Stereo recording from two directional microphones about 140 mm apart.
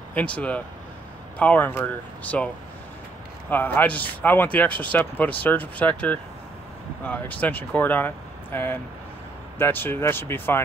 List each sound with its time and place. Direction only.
0.1 s speech: 10° left (ahead or behind)